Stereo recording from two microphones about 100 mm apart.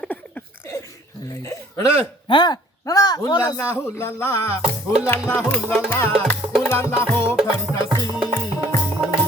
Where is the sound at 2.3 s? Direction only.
50° left (ahead or behind).